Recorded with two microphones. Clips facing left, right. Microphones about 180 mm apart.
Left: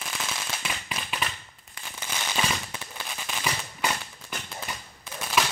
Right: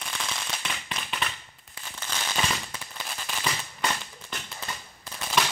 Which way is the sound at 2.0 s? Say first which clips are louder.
Even; 10° left (ahead or behind).